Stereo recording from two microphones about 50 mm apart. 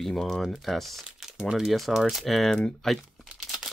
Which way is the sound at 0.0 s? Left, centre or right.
Centre.